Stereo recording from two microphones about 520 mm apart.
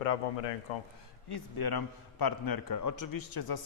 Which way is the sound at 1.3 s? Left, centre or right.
Left.